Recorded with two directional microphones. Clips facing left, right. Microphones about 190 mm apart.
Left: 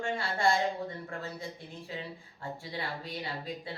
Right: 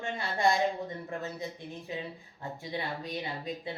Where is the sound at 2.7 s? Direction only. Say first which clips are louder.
Right 4 dB; 20° right (ahead or behind).